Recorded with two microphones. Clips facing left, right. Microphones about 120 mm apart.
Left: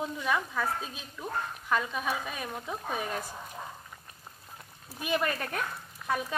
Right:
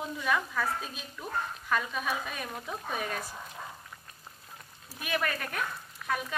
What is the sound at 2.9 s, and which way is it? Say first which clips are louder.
Speech: even; 25° left (ahead or behind).